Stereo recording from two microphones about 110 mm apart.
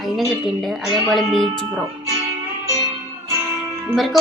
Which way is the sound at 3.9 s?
Centre (ahead or behind).